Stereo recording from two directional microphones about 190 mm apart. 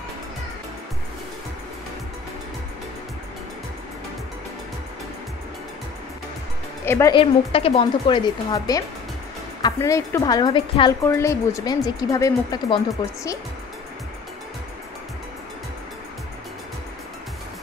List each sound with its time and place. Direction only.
6.8 s music: 15° left (ahead or behind)
7.1 s speech: 30° left (ahead or behind)